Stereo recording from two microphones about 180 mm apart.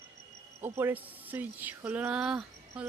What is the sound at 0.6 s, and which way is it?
Speech, 10° right (ahead or behind).